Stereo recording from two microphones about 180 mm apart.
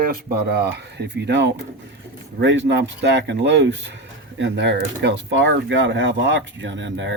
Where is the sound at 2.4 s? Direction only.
85° right.